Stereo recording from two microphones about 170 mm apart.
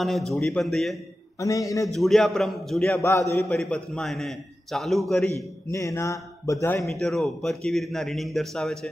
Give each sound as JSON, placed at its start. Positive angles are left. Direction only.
{"t": 0.0, "sound": "speech", "side_deg": 0}
{"t": 1.4, "sound": "a man's voice", "side_deg": 20}
{"t": 1.9, "sound": "speech", "side_deg": 0}
{"t": 2.9, "sound": "speech", "side_deg": 15}
{"t": 3.4, "sound": "speech", "side_deg": 5}
{"t": 5.7, "sound": "speech", "side_deg": 15}
{"t": 6.9, "sound": "speech", "side_deg": 0}